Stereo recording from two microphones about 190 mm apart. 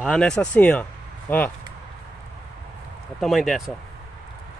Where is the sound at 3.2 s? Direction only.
Centre (ahead or behind).